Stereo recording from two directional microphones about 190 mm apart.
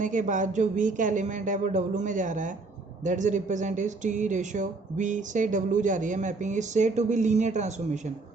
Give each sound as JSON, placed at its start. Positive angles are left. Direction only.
{"t": 0.0, "sound": "speech", "side_deg": -40}